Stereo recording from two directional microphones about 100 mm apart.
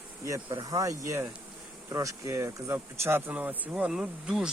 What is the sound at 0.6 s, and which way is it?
Speech, 35° right (ahead or behind).